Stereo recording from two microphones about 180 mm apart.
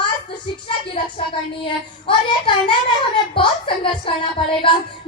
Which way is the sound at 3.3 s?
30° left (ahead or behind).